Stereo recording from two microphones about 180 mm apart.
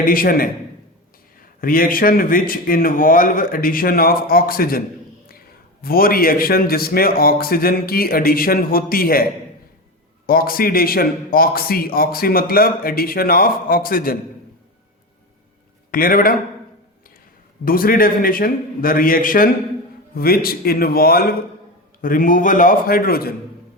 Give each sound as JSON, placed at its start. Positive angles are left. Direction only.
{"t": 0.0, "sound": "a man's voice", "side_deg": 50}
{"t": 1.6, "sound": "a man's voice", "side_deg": 50}
{"t": 5.8, "sound": "a man's voice", "side_deg": 55}
{"t": 10.2, "sound": "a man's voice", "side_deg": 55}
{"t": 15.9, "sound": "a man's voice", "side_deg": 50}
{"t": 17.7, "sound": "a man's voice", "side_deg": 50}